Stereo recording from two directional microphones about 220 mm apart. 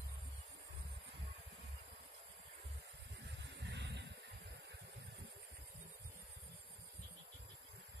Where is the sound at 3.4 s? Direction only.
50° right (ahead or behind).